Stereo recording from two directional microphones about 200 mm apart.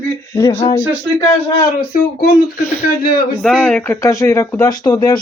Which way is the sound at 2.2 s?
55° left (ahead or behind).